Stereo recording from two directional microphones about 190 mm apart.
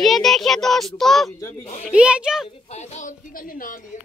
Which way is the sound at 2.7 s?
35° left (ahead or behind).